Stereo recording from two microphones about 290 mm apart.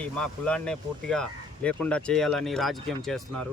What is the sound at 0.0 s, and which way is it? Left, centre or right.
Speech, centre.